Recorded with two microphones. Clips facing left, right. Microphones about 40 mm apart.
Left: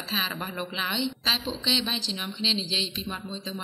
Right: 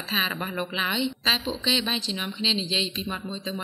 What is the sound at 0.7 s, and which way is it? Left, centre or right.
Speech, centre.